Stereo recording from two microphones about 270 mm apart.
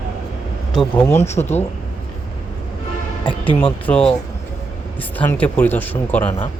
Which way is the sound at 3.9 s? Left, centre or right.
Centre.